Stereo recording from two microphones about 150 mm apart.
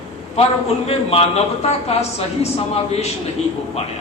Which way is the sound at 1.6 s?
45° left (ahead or behind).